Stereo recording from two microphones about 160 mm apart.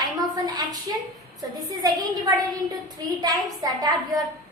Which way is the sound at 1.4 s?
25° right (ahead or behind).